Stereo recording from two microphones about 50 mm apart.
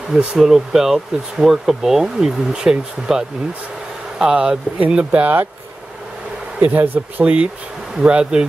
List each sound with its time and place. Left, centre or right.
0.1 s speech: centre; by 5.3 s right
6.6 s speech: right
8.0 s speech: centre